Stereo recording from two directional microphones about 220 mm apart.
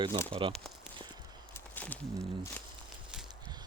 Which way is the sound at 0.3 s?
25° right (ahead or behind).